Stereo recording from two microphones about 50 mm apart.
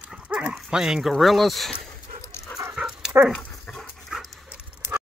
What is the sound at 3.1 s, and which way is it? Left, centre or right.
Dog, right.